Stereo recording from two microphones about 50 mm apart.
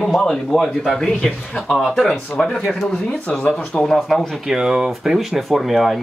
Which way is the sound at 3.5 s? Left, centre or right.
Centre.